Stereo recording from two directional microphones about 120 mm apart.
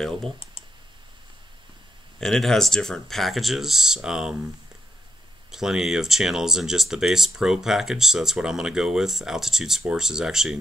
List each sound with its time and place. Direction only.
2.1 s speech: 5° left (ahead or behind)
5.5 s speech: 5° right (ahead or behind)